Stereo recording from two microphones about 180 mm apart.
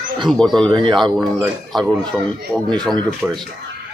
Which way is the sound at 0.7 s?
25° right (ahead or behind).